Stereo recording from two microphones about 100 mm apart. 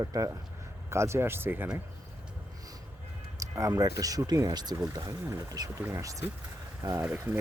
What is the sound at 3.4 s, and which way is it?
Speech, 35° right (ahead or behind).